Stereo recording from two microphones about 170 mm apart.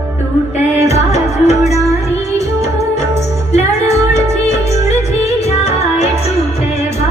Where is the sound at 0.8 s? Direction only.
40° left (ahead or behind).